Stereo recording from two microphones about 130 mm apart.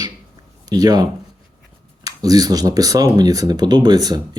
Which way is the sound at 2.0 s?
30° right (ahead or behind).